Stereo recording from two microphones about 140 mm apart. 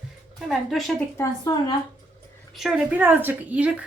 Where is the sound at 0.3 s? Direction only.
Centre (ahead or behind).